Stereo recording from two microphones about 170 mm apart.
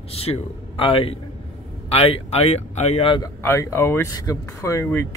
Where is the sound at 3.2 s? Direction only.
15° left (ahead or behind).